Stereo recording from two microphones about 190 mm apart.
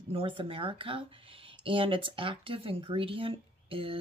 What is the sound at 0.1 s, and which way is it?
Speech, 30° right (ahead or behind).